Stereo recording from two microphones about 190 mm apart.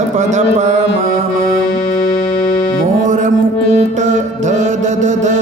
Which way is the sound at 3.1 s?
40° right (ahead or behind).